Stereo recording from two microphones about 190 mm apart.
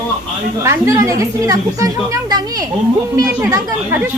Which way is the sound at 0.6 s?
15° right (ahead or behind).